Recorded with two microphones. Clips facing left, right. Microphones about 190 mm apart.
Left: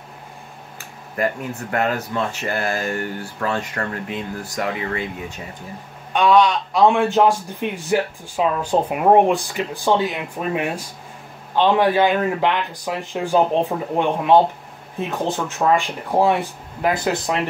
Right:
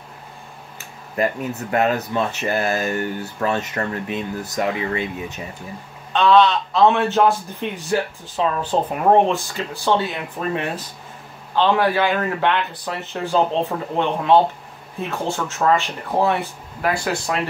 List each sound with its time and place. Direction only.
1.1 s speech: 20° right (ahead or behind)
6.1 s a man's voice: 15° left (ahead or behind)